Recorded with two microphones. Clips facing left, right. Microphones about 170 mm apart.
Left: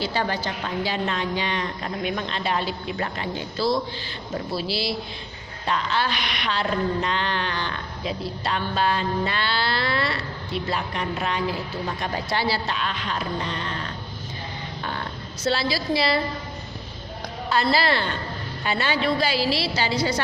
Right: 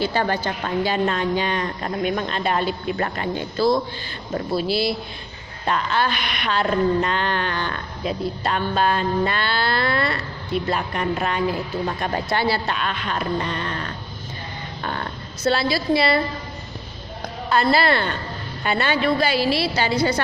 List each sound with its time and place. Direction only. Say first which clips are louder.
0.0 s mantra: right 4 dB; 50° right (ahead or behind)
11.9 s speech: right 2 dB; 55° right (ahead or behind)
14.8 s a sound: right 3 dB; 50° right (ahead or behind)
15.4 s speech: right 4 dB; 55° right (ahead or behind)
17.2 s a woman's voice: right 3 dB; 50° right (ahead or behind)